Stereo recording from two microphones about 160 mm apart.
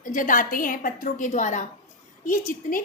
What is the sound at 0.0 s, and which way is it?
A woman's voice, 55° left (ahead or behind).